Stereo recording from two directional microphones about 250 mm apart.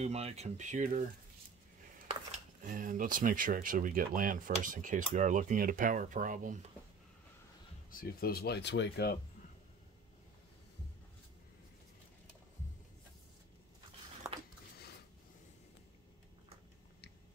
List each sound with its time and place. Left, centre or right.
0.0 s speech: right
2.6 s speech: right
7.9 s speech: left